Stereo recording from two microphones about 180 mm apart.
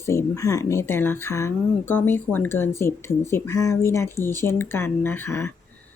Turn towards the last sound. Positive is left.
turn(degrees=10)  # may be behind; listen again after turning